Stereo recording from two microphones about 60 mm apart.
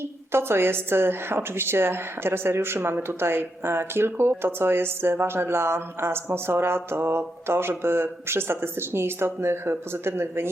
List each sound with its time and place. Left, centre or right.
0.3 s a woman's voice: right